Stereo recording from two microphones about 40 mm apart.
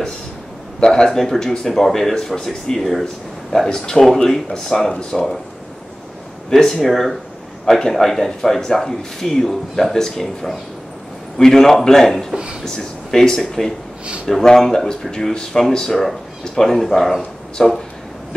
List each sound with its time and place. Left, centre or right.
0.7 s speech: left
1.1 s speech: centre
6.5 s speech: centre
17.6 s speech: centre